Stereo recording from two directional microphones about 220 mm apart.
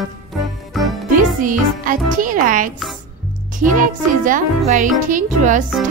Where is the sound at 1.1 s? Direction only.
35° right (ahead or behind).